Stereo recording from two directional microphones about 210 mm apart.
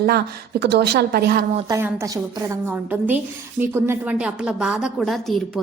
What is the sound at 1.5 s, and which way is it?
A woman's voice, 15° right (ahead or behind).